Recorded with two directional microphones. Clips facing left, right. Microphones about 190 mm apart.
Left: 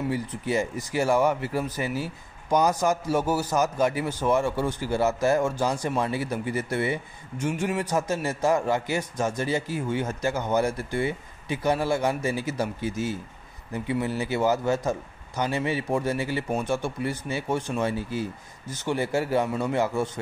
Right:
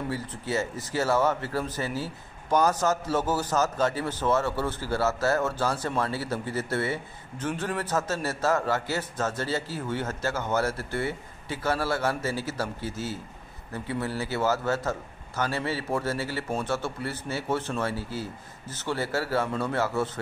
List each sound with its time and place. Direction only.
0.1 s speech: 15° left (ahead or behind)